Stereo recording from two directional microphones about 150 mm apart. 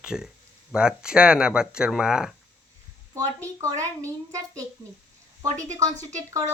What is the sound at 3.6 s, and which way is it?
Speech, 20° right (ahead or behind).